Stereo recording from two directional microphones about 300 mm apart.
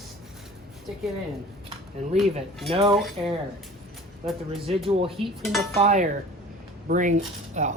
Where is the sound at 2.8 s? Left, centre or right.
Centre.